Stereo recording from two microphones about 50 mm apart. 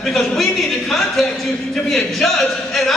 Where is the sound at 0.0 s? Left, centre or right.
Centre.